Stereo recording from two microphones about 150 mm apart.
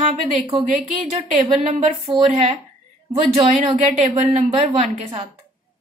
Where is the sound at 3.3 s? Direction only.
45° right (ahead or behind).